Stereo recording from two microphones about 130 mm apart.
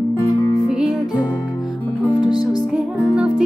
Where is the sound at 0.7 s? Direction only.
5° right (ahead or behind).